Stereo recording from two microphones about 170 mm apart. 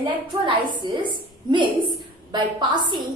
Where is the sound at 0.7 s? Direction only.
30° right (ahead or behind).